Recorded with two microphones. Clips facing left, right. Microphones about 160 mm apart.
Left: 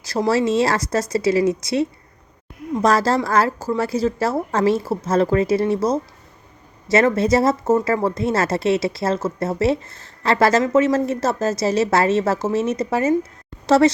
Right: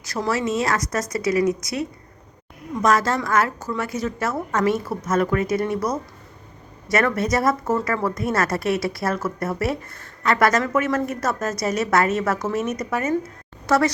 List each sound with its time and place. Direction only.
0.0 s a woman's voice: 30° left (ahead or behind)